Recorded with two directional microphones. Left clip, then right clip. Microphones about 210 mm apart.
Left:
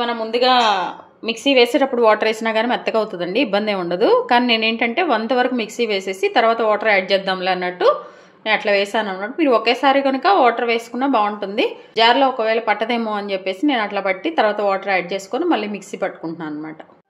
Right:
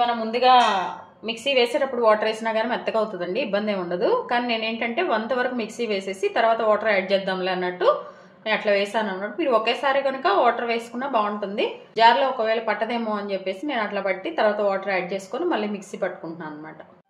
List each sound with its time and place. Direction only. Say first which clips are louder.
0.3 s speech: left 1 dB; 55° left (ahead or behind)
1.2 s a woman's voice: left 6 dB; 45° left (ahead or behind)